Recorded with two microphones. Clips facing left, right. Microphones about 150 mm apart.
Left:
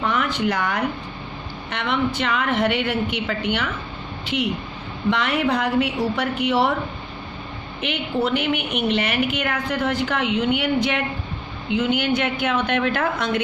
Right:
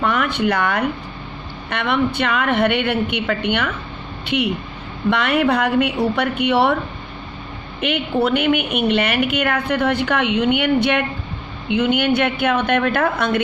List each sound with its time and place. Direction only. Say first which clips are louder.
0.0 s a woman's voice: right 3 dB; 60° right (ahead or behind)
7.8 s a woman's voice: right 4 dB; 60° right (ahead or behind)